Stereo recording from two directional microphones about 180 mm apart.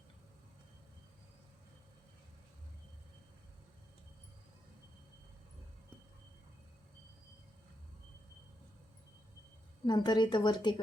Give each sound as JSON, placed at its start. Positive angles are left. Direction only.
{"t": 9.8, "sound": "a woman's voice", "side_deg": 25}